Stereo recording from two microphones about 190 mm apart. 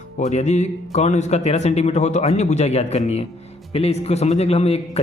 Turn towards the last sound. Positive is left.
turn(degrees=30)  # may be behind; listen again after turning